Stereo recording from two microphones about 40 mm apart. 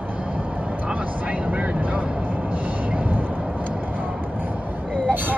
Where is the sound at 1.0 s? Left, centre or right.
Right.